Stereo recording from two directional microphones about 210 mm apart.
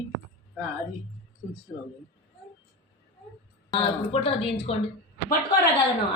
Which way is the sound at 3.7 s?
25° left (ahead or behind).